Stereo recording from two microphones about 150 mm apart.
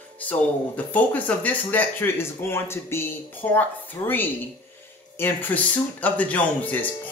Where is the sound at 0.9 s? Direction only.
10° left (ahead or behind).